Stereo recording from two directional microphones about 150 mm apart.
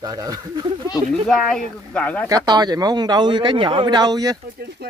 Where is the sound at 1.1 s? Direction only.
Centre (ahead or behind).